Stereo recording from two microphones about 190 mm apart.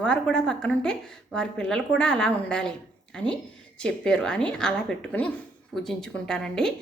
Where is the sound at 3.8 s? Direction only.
5° left (ahead or behind).